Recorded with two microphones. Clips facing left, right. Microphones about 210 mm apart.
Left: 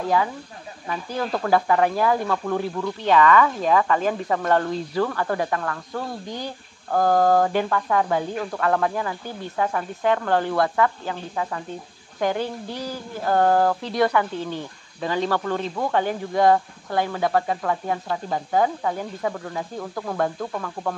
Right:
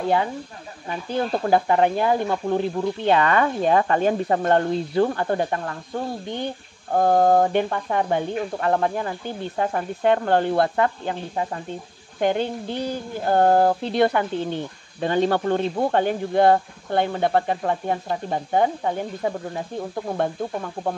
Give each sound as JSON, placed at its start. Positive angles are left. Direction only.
{"t": 0.8, "sound": "speech", "side_deg": -25}
{"t": 12.2, "sound": "speech", "side_deg": -25}
{"t": 15.1, "sound": "speech", "side_deg": -45}
{"t": 15.4, "sound": "speech", "side_deg": -30}